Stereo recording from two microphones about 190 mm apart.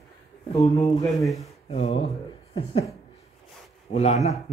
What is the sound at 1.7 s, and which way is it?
Speech, 35° left (ahead or behind).